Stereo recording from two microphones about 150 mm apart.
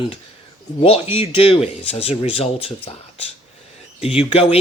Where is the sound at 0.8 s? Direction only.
40° left (ahead or behind).